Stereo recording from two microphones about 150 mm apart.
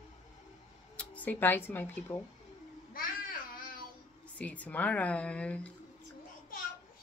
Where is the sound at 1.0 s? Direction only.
10° left (ahead or behind).